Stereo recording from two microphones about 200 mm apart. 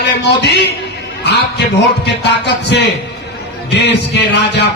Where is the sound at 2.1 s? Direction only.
60° left (ahead or behind).